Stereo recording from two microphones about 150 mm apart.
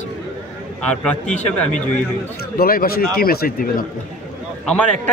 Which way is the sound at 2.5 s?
80° left.